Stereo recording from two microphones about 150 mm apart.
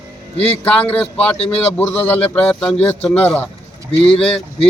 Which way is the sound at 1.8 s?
10° left (ahead or behind).